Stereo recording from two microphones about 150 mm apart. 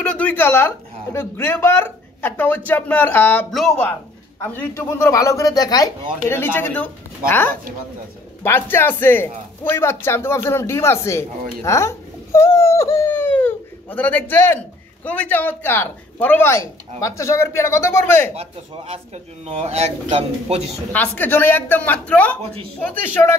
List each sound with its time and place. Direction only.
0.0 s speech: 10° left (ahead or behind)
3.5 s speech: centre (ahead or behind)
4.4 s speech: 10° left (ahead or behind)
18.3 s speech: 45° right (ahead or behind)
20.9 s speech: 10° left (ahead or behind)
22.4 s speech: 40° right (ahead or behind)
22.8 s speech: 10° left (ahead or behind)